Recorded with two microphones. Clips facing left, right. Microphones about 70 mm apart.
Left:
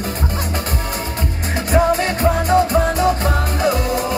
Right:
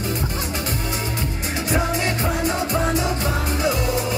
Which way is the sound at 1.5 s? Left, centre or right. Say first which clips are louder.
Left 7 dB; left.